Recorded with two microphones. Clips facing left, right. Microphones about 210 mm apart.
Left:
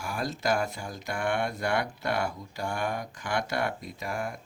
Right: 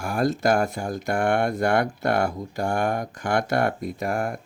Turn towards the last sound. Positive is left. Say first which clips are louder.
# right 8 dB
turn(degrees=-55)  # may be behind; listen again after turning